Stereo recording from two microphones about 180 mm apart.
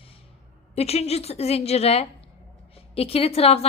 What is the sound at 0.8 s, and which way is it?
A woman's voice, 35° left (ahead or behind).